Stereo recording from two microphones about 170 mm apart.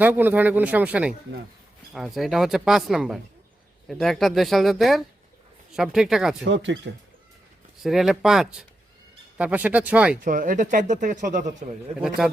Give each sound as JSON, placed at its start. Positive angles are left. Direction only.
{"t": 0.0, "sound": "a man's voice", "side_deg": -10}
{"t": 6.4, "sound": "speech", "side_deg": -90}
{"t": 7.8, "sound": "a man's voice", "side_deg": 0}
{"t": 10.2, "sound": "speech", "side_deg": -55}
{"t": 11.9, "sound": "speech", "side_deg": -5}